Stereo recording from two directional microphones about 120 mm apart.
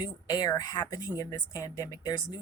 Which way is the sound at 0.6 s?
30° left (ahead or behind).